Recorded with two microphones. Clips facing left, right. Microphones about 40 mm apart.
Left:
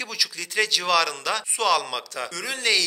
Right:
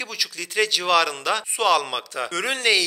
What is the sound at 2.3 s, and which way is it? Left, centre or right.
Speech, right.